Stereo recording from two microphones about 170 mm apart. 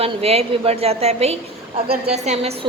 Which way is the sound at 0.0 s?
35° right (ahead or behind).